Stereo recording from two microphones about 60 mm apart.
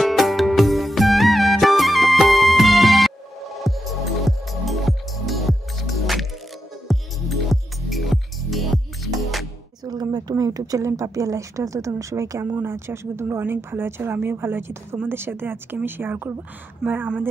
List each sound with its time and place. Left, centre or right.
0.0 s music: centre
10.1 s speech: right
12.6 s speech: right